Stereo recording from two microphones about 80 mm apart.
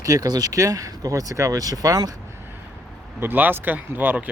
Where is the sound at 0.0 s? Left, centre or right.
Right.